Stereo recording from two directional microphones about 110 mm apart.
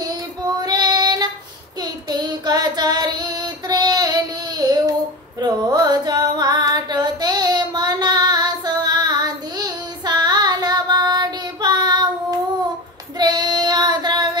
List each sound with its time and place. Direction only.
0.0 s child singing: 35° right (ahead or behind)
5.4 s carnatic music: 40° right (ahead or behind)
13.2 s child singing: 40° right (ahead or behind)